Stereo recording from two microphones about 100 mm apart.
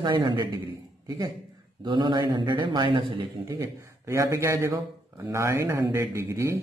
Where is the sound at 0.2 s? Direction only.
45° right (ahead or behind).